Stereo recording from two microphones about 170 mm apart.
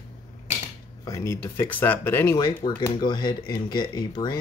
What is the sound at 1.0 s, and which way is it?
Speech, 20° left (ahead or behind).